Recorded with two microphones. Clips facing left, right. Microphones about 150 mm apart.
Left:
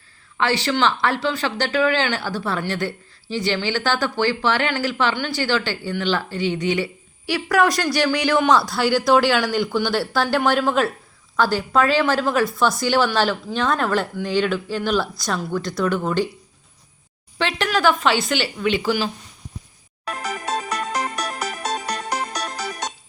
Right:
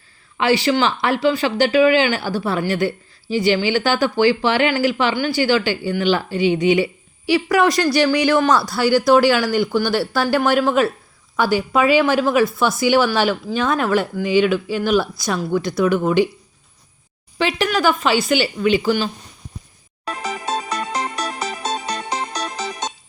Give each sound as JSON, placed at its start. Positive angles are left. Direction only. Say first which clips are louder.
{"t": 0.3, "sound": "speech", "louder": "right 4 dB", "side_deg": -10}
{"t": 17.3, "sound": "speech", "louder": "right 3 dB", "side_deg": -5}
{"t": 21.0, "sound": "music", "louder": "right 1 dB", "side_deg": -30}